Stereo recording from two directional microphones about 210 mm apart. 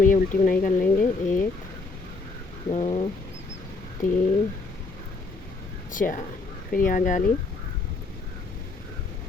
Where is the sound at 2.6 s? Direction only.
30° left (ahead or behind).